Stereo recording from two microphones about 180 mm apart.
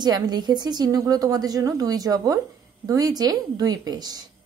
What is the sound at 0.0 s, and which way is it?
A woman's voice, 25° right (ahead or behind).